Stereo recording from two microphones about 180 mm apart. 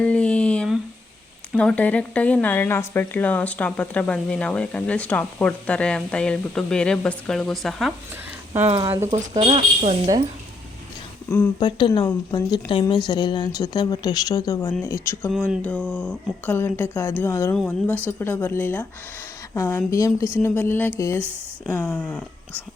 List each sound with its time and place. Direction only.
0.0 s a sound: 5° left (ahead or behind)
1.5 s speech: 5° left (ahead or behind)
9.3 s speech: 30° right (ahead or behind)
11.3 s speech: 10° left (ahead or behind)
11.6 s a woman's voice: 25° left (ahead or behind); by 22.2 s 5° left (ahead or behind)